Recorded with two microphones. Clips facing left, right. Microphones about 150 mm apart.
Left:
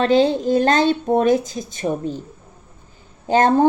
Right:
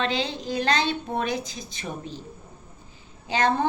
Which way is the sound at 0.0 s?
50° left (ahead or behind).